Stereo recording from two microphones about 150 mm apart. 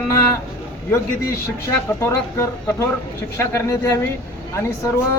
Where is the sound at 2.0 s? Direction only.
15° left (ahead or behind).